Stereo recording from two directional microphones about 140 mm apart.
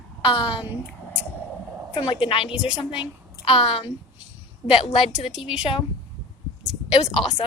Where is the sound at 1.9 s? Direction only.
35° left (ahead or behind).